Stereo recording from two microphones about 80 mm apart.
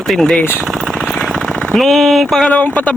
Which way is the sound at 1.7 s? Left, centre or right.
Centre.